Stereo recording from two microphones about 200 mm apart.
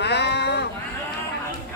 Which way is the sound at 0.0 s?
55° left (ahead or behind).